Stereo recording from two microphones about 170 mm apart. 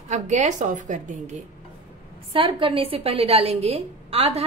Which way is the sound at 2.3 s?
30° right (ahead or behind).